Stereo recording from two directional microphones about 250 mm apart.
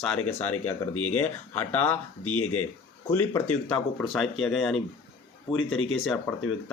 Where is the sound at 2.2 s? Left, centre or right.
Left.